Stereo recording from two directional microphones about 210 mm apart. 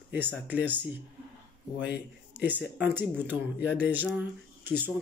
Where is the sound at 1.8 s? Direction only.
55° left (ahead or behind).